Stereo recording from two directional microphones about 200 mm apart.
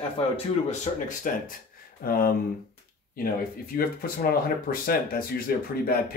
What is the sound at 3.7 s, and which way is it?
Speech, 45° left (ahead or behind).